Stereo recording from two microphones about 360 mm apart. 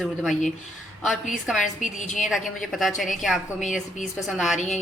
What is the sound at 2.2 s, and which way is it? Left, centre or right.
A woman's voice, centre.